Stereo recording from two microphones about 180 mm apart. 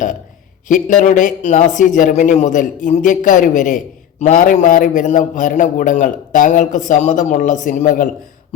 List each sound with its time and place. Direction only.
0.7 s a man's voice: 45° left (ahead or behind)